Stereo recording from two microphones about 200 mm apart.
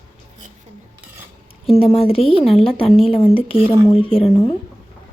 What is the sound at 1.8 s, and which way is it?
Speech, 30° left (ahead or behind).